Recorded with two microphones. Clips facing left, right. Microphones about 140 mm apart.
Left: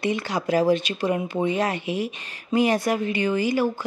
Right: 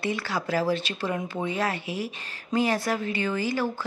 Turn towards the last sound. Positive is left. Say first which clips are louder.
# left 5 dB
turn(degrees=15)  # may be behind; listen again after turning